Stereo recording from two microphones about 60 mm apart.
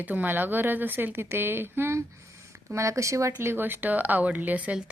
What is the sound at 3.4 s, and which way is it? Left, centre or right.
Speech, right.